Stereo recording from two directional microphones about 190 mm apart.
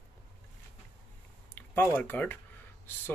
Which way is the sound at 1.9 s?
10° left (ahead or behind).